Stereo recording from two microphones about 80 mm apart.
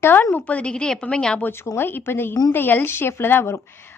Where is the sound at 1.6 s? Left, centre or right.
Left.